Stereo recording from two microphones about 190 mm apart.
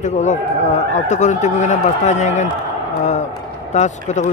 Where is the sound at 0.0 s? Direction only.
40° left (ahead or behind).